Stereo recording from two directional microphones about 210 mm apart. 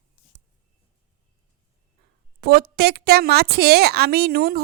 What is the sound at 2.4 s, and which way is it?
A woman's voice, 50° right (ahead or behind).